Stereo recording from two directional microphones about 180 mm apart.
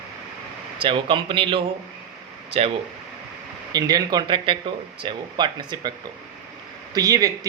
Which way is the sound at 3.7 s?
20° right (ahead or behind).